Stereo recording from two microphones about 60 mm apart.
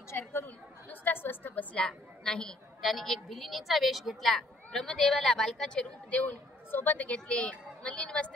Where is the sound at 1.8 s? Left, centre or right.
Centre.